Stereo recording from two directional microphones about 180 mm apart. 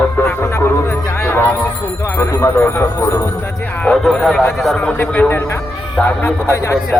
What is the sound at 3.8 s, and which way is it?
A man's voice, 5° left (ahead or behind).